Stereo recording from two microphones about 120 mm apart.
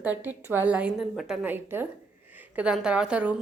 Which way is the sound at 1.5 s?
20° right (ahead or behind).